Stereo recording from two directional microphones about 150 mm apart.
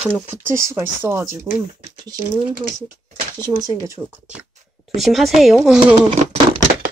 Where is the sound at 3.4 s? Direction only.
25° right (ahead or behind).